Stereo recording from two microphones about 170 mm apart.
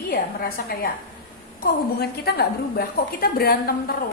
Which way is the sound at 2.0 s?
70° left (ahead or behind).